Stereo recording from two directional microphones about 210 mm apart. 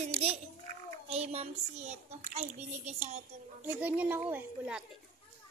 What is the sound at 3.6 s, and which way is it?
A child's voice, 10° right (ahead or behind).